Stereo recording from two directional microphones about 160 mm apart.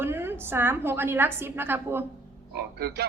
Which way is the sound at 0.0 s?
15° right (ahead or behind).